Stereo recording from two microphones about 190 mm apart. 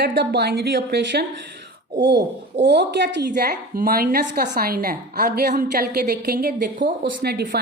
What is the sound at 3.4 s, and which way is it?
A woman's voice, 55° right (ahead or behind).